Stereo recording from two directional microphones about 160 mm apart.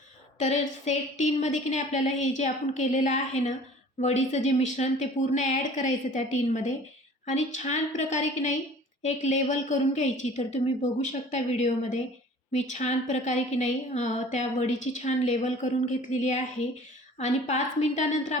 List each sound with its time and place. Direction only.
0.3 s a woman's voice: 50° left (ahead or behind)